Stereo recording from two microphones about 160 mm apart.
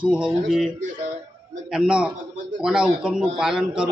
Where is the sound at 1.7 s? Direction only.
5° right (ahead or behind).